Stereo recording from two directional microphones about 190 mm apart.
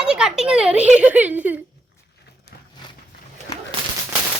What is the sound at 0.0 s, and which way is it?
Speech, 5° right (ahead or behind).